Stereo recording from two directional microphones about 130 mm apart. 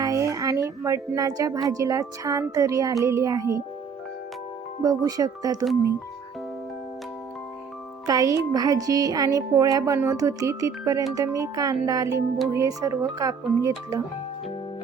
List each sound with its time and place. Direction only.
0.0 s a sound: 25° right (ahead or behind)
1.7 s speech: 25° right (ahead or behind)
4.8 s speech: 25° right (ahead or behind)
8.0 s speech: 25° right (ahead or behind)